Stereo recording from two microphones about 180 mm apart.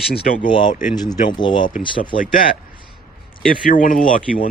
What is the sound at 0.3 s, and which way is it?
Speech, 45° left (ahead or behind).